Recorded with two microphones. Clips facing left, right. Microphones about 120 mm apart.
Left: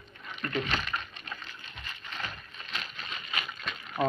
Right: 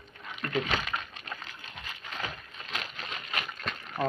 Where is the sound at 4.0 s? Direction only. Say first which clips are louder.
Left 2 dB; 20° left (ahead or behind).